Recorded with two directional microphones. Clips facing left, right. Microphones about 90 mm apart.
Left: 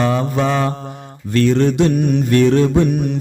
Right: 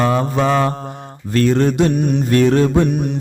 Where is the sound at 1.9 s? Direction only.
20° right (ahead or behind).